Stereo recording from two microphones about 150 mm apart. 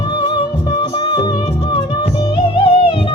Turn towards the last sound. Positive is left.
turn(degrees=35)  # may be behind; listen again after turning